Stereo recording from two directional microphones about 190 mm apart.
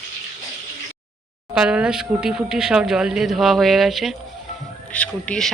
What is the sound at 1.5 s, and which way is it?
Speech, 5° right (ahead or behind).